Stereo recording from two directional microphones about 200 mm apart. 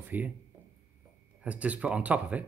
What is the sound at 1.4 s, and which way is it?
Speech, 5° right (ahead or behind).